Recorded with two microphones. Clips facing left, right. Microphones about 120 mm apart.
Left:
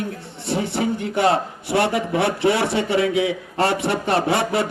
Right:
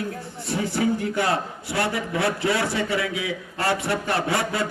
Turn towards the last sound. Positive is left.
turn(degrees=25)  # may be behind; listen again after turning